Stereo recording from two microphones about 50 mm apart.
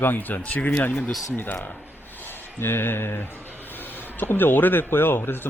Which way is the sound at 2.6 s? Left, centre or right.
Left.